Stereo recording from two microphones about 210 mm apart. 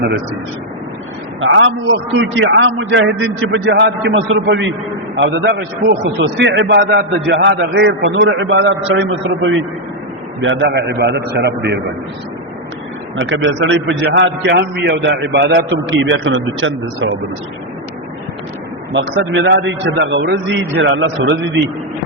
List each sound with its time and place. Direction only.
1.4 s a man's voice: 65° right (ahead or behind)
13.1 s a man's voice: 65° right (ahead or behind)
18.9 s a man's voice: 60° right (ahead or behind)